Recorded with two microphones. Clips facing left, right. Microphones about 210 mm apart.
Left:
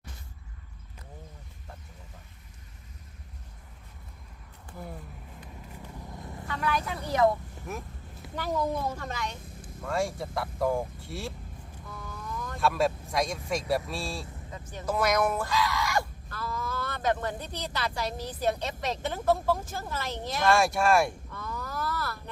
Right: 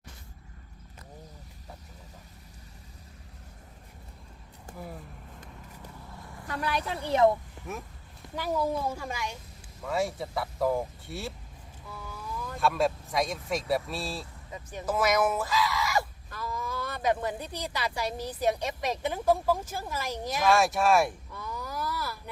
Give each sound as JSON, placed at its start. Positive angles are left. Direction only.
{"t": 6.5, "sound": "speech", "side_deg": -35}
{"t": 7.7, "sound": "speech", "side_deg": 0}
{"t": 14.5, "sound": "a woman's voice", "side_deg": -15}
{"t": 14.8, "sound": "speech", "side_deg": -5}
{"t": 16.3, "sound": "a woman's voice", "side_deg": -15}
{"t": 21.3, "sound": "a sound", "side_deg": -10}